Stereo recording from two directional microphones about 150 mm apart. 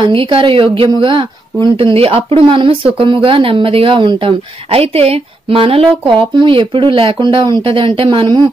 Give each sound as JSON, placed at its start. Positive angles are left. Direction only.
{"t": 0.0, "sound": "speech", "side_deg": -35}